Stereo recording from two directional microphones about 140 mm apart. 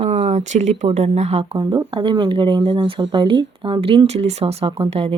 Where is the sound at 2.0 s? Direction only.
35° right (ahead or behind).